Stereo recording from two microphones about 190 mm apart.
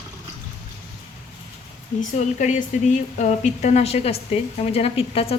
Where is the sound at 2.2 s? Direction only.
40° left (ahead or behind).